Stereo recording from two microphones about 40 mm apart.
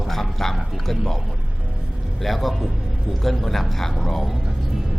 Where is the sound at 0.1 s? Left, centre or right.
Centre.